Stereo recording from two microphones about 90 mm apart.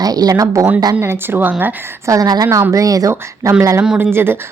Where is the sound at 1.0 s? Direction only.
25° right (ahead or behind).